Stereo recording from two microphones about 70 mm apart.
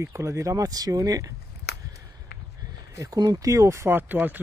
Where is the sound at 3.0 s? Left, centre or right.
Right.